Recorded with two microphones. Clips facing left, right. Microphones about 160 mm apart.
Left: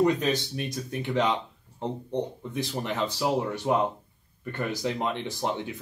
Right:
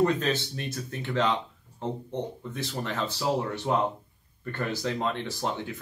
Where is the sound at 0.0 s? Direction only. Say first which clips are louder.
Left 1 dB; 15° left (ahead or behind).